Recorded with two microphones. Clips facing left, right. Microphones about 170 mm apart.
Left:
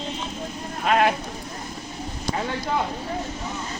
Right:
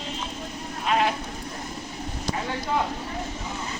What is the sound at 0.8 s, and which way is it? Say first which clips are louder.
Sheep: left 4 dB; 60° left (ahead or behind).